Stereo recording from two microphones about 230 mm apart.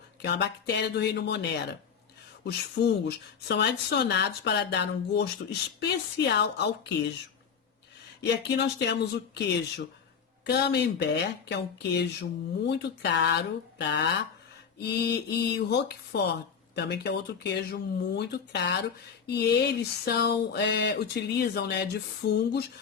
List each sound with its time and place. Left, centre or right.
0.2 s speech: left
8.2 s speech: left